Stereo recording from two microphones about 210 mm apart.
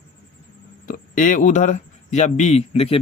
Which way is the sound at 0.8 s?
40° left (ahead or behind).